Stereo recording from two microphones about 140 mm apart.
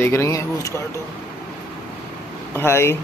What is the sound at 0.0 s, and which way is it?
Speech, 20° left (ahead or behind).